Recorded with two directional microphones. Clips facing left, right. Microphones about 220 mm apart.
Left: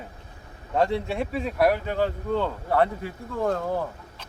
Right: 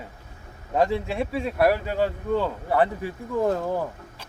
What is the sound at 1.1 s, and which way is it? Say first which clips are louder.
Speech: right 1 dB; centre (ahead or behind).